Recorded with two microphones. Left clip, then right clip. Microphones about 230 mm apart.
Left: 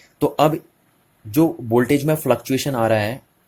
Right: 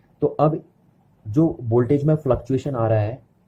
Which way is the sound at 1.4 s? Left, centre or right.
Left.